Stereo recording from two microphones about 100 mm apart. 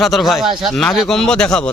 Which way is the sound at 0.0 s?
Centre (ahead or behind).